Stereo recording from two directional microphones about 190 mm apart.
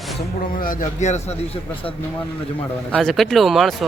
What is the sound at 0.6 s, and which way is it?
Speech, 45° left (ahead or behind).